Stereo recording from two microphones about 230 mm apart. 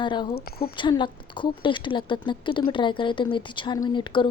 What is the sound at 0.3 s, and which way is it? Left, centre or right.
Speech, left.